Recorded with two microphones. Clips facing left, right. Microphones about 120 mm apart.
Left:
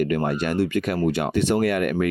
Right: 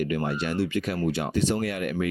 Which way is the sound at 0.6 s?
55° left (ahead or behind).